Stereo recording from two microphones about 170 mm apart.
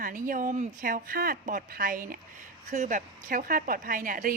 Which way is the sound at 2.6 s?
45° right (ahead or behind).